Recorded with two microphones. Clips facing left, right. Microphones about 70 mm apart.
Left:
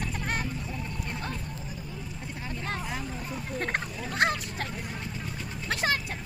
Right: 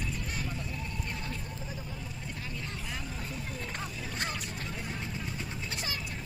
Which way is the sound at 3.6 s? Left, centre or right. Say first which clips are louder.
Left 7 dB; left.